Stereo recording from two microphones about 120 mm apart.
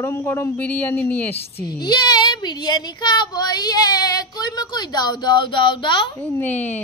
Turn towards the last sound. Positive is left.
turn(degrees=15)  # may be behind; listen again after turning